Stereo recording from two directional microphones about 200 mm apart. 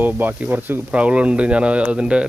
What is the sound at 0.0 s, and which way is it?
Speech, 10° right (ahead or behind).